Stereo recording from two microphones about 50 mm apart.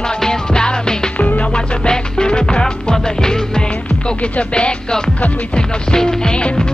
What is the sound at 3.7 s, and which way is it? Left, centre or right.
Music, left.